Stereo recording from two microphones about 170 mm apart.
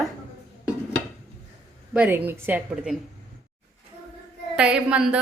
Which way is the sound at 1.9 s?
10° right (ahead or behind).